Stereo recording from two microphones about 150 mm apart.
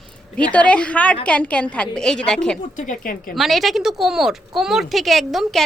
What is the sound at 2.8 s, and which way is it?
Speech, 65° left (ahead or behind).